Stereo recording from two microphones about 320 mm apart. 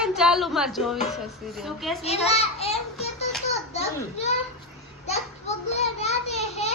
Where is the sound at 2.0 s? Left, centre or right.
Centre.